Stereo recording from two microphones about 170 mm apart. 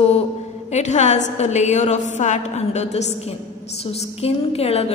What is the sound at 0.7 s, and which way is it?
A woman's voice, 40° left (ahead or behind).